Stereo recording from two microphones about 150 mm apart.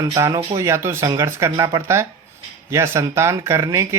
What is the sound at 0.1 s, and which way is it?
Speech, 20° right (ahead or behind).